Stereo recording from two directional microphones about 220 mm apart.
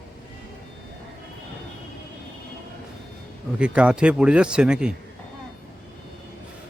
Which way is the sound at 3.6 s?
5° right (ahead or behind).